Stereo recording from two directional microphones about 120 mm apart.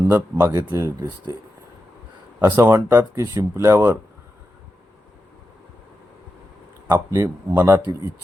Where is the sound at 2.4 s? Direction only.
20° right (ahead or behind).